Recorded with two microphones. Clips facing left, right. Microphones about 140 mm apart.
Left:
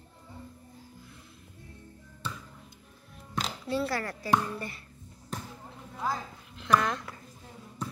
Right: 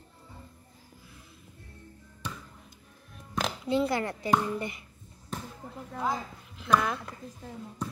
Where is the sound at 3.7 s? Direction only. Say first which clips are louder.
Right 4 dB; 20° right (ahead or behind).